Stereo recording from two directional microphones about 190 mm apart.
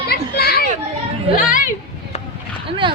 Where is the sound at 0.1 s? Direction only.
55° left (ahead or behind).